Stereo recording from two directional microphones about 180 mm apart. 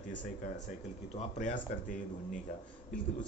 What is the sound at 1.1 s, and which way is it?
Speech, 45° left (ahead or behind).